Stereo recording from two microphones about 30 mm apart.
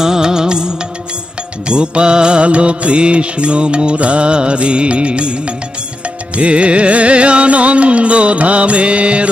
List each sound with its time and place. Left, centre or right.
0.0 s music: right